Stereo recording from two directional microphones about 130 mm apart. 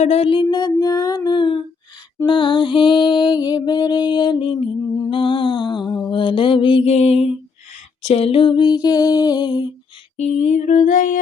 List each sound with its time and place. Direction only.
0.0 s music: 50° left (ahead or behind)
0.5 s music: 30° left (ahead or behind)
10.2 s mantra: 55° left (ahead or behind); by 11.2 s 85° left